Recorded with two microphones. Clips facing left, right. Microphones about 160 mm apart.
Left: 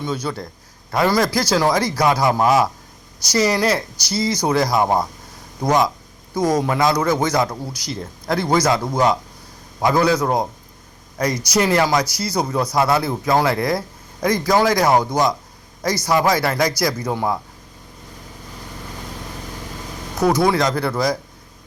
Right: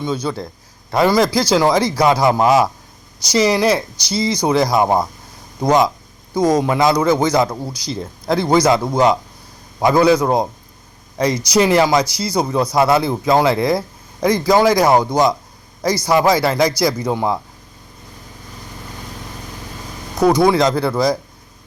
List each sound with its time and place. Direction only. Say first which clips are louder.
0.0 s a man's voice: right 3 dB; 25° right (ahead or behind)
20.4 s a man's voice: right 4 dB; 25° right (ahead or behind)